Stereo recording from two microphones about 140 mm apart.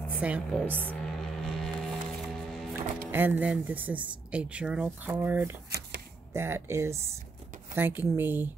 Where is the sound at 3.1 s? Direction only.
15° right (ahead or behind).